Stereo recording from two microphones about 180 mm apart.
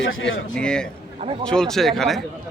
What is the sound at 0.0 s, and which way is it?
Speech, 90° left.